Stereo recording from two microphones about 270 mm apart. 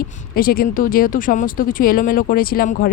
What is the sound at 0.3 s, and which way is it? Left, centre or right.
Speech, left.